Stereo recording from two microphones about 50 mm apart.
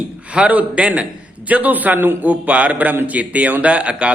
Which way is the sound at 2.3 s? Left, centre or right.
Right.